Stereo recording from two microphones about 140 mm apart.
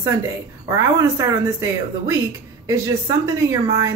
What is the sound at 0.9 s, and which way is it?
A woman's voice, 20° right (ahead or behind).